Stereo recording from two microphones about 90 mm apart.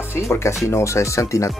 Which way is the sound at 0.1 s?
30° left (ahead or behind).